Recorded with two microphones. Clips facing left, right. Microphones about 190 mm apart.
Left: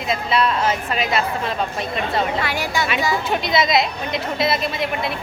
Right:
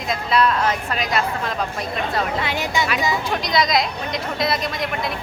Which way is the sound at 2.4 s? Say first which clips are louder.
Even; 20° right (ahead or behind).